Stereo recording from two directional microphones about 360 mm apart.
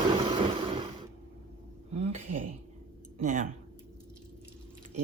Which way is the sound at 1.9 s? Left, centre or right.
Centre.